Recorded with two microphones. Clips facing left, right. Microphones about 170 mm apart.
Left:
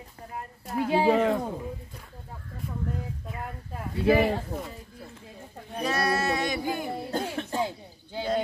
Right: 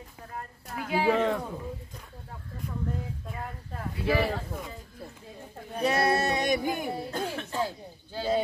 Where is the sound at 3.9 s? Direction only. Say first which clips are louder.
Left 5 dB; 25° left (ahead or behind).